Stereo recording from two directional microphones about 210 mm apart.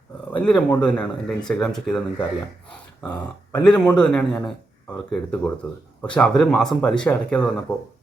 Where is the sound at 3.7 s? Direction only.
5° left (ahead or behind).